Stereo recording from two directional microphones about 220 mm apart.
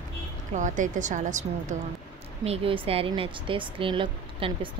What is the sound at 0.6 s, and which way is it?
Speech, 35° right (ahead or behind).